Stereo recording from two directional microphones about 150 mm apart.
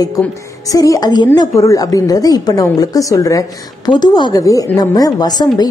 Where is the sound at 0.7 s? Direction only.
25° left (ahead or behind).